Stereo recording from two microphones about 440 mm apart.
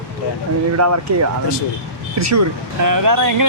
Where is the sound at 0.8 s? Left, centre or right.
Right.